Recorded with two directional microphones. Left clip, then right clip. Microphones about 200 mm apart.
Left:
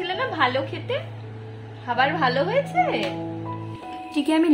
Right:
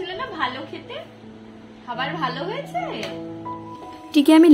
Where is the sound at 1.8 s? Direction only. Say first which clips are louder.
Left 5 dB; 45° left (ahead or behind).